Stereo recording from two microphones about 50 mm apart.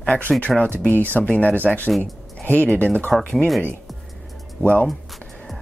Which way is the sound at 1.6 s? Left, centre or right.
Left.